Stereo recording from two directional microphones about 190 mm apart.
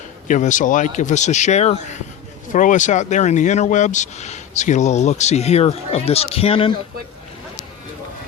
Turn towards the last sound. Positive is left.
turn(degrees=30)  # may be behind; listen again after turning